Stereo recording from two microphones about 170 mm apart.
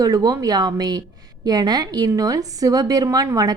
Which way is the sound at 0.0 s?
20° right (ahead or behind).